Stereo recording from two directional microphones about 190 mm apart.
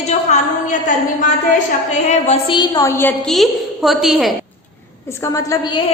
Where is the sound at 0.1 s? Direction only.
40° left (ahead or behind).